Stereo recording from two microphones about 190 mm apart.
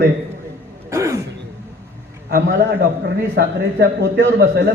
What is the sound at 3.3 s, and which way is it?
A man's voice, 60° right (ahead or behind).